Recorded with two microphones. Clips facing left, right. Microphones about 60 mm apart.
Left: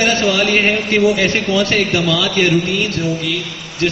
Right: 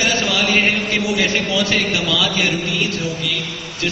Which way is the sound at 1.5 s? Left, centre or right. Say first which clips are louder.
Left 3 dB; left.